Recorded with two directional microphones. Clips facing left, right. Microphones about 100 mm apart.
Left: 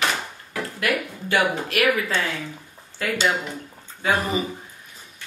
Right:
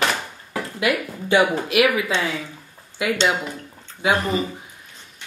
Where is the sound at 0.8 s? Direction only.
15° right (ahead or behind).